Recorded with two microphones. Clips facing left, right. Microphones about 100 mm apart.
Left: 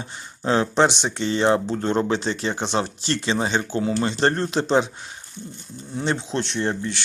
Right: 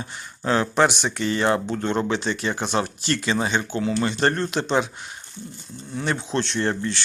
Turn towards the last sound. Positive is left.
turn(degrees=15)  # may be behind; listen again after turning